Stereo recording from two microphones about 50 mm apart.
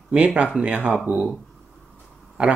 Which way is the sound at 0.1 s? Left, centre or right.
Right.